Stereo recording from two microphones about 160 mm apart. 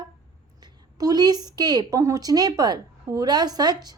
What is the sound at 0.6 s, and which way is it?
A woman's voice, 25° right (ahead or behind).